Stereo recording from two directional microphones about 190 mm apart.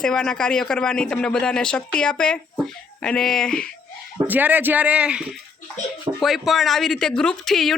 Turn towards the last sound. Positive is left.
turn(degrees=0)  # may be behind; listen again after turning